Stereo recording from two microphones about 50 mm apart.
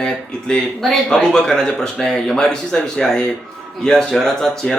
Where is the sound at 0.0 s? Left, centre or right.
Centre.